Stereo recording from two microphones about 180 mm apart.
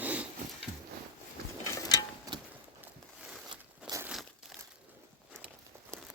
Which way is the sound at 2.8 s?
5° right (ahead or behind).